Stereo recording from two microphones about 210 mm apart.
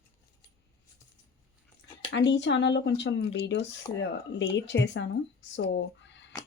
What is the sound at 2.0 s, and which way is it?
Speech, 55° left (ahead or behind).